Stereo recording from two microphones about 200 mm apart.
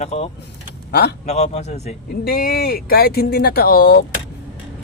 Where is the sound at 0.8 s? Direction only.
55° left (ahead or behind).